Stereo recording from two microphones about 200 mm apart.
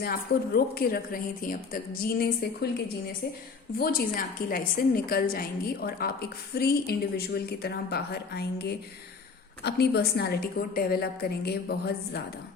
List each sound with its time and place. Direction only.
0.0 s a woman's voice: 50° left (ahead or behind)
3.8 s a woman's voice: 50° left (ahead or behind)